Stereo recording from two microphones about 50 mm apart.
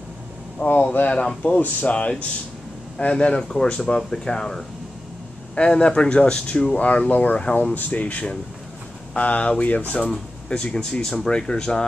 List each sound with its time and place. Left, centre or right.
0.6 s speech: left
1.1 s speech: centre
1.6 s speech: left
6.8 s speech: left
10.0 s speech: centre